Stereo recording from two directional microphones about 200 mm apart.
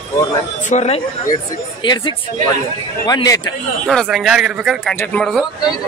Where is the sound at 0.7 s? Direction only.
35° left (ahead or behind).